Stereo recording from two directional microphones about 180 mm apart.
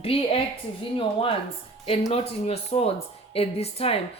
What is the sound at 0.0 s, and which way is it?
Speech, 30° left (ahead or behind).